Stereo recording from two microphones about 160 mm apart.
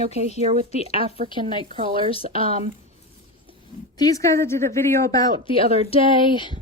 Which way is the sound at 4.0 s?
20° left (ahead or behind).